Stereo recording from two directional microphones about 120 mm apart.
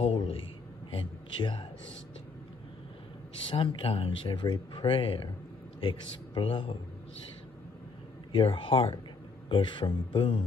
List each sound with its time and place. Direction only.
0.0 s a sound: 50° left (ahead or behind)
3.4 s a man's voice: 50° left (ahead or behind)
8.4 s speech: 50° left (ahead or behind)